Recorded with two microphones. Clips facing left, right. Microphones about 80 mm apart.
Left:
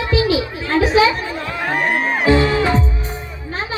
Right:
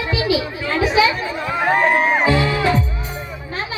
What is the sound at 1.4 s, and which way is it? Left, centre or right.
Chatter, centre.